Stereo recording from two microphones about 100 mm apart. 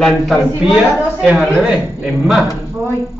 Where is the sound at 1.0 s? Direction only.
10° right (ahead or behind).